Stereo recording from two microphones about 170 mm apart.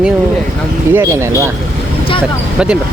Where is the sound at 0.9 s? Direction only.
15° right (ahead or behind).